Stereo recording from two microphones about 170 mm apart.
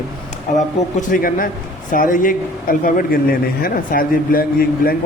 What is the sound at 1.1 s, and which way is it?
A man's voice, 55° left (ahead or behind).